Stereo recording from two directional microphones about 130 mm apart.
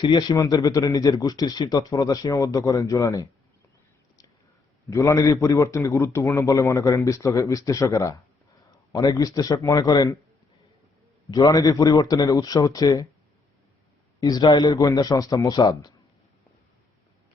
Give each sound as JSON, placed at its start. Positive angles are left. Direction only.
{"t": 0.0, "sound": "speech", "side_deg": 35}
{"t": 4.9, "sound": "speech", "side_deg": 25}
{"t": 11.3, "sound": "speech", "side_deg": 30}
{"t": 14.2, "sound": "speech", "side_deg": 30}